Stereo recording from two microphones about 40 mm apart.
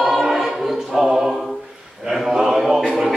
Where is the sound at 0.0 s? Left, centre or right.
Centre.